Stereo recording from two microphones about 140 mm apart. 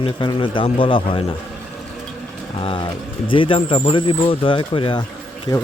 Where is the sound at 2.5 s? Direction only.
40° left (ahead or behind).